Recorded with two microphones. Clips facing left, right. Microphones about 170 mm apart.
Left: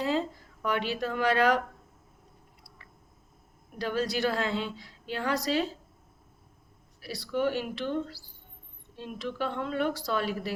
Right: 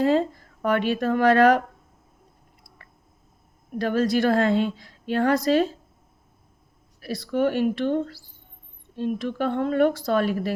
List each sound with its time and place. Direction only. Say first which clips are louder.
0.0 s a woman's voice: right 8 dB; 50° right (ahead or behind)
3.8 s a woman's voice: right 8 dB; 50° right (ahead or behind)
7.0 s a woman's voice: right 6 dB; 50° right (ahead or behind)